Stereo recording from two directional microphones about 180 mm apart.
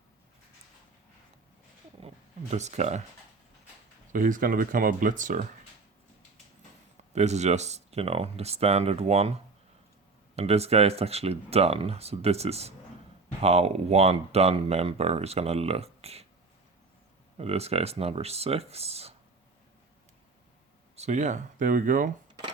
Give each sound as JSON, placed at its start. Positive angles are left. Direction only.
{"t": 2.0, "sound": "a sound", "side_deg": -35}
{"t": 4.1, "sound": "speech", "side_deg": -50}
{"t": 7.1, "sound": "speech", "side_deg": -40}
{"t": 17.3, "sound": "speech", "side_deg": -35}
{"t": 20.9, "sound": "speech", "side_deg": -40}